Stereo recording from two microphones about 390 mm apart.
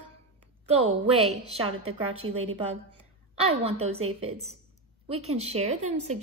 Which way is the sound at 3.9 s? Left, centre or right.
Right.